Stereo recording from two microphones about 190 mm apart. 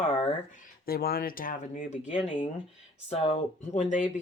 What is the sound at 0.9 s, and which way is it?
Speech, 50° left (ahead or behind).